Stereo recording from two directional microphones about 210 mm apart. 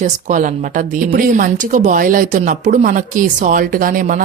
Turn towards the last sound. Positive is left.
turn(degrees=-40)  # may be behind; listen again after turning